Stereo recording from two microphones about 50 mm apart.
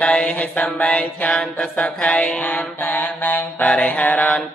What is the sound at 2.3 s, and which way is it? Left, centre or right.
Mantra, left.